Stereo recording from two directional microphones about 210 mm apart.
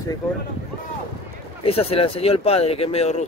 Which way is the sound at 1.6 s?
30° left (ahead or behind).